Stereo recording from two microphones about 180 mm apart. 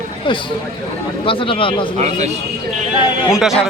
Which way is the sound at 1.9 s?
35° right (ahead or behind).